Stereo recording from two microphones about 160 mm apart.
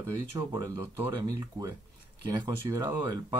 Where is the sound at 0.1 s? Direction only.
20° right (ahead or behind).